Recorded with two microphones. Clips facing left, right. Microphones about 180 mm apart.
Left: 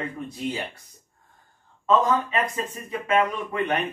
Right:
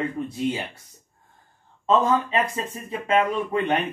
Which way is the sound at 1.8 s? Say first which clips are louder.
Right 1 dB; 30° right (ahead or behind).